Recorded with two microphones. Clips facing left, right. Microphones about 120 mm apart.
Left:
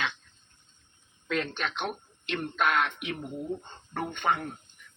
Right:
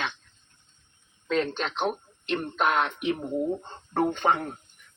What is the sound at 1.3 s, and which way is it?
Speech, 30° right (ahead or behind).